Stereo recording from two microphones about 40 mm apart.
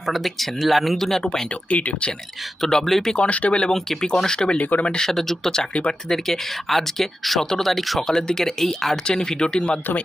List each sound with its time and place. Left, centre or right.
0.2 s speech: centre
1.2 s speech: centre
1.7 s speech: left
2.6 s speech: centre
3.2 s speech: left
3.7 s speech: centre
4.5 s speech: left
4.9 s speech: centre
8.0 s speech: centre